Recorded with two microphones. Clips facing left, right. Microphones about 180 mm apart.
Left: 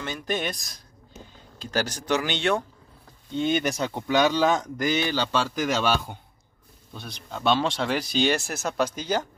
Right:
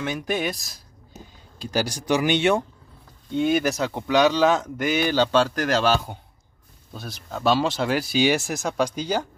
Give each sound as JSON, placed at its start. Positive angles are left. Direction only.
{"t": 0.0, "sound": "speech", "side_deg": -10}
{"t": 5.5, "sound": "speech", "side_deg": 0}